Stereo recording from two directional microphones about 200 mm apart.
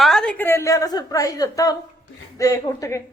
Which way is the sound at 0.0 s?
Centre (ahead or behind).